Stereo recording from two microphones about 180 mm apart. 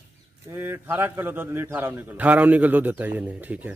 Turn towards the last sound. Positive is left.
turn(degrees=-10)  # may be behind; listen again after turning